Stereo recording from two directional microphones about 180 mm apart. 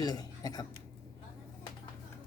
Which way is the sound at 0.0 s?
20° left (ahead or behind).